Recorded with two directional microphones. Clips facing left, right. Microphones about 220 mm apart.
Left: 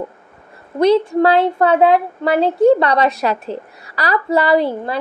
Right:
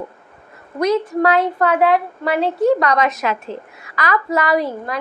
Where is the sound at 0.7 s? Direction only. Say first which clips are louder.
Left 5 dB; 30° left (ahead or behind).